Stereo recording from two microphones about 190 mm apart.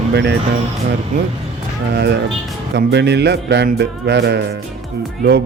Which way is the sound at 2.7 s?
65° right (ahead or behind).